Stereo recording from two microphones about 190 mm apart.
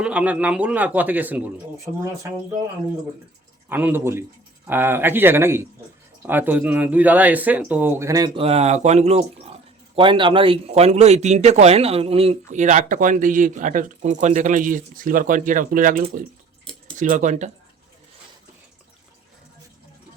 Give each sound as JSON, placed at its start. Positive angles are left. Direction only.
{"t": 0.0, "sound": "a man's voice", "side_deg": -5}
{"t": 3.7, "sound": "a man's voice", "side_deg": -10}
{"t": 8.4, "sound": "a man's voice", "side_deg": -30}